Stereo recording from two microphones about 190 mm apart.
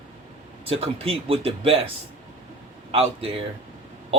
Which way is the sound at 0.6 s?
30° right (ahead or behind).